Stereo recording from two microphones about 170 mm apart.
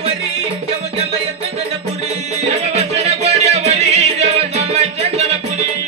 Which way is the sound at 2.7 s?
40° right (ahead or behind).